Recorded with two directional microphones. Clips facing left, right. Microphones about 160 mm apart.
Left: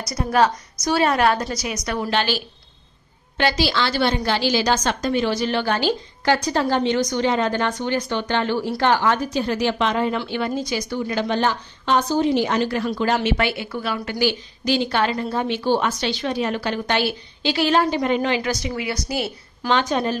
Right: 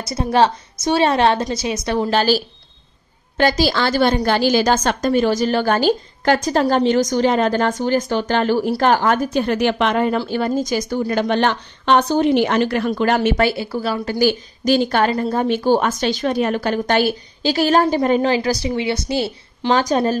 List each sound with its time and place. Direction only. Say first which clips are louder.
0.0 s a woman's voice: right 3 dB; 25° right (ahead or behind)
2.0 s a woman's voice: right 5 dB; 40° right (ahead or behind); by 10.1 s 60° right (ahead or behind)
10.1 s a woman's voice: right 5 dB; 40° right (ahead or behind)